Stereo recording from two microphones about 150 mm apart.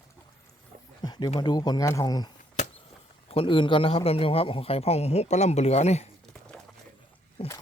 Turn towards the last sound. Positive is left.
turn(degrees=40)  # may be behind; listen again after turning